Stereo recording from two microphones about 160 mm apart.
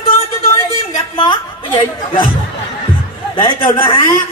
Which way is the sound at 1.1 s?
30° left (ahead or behind).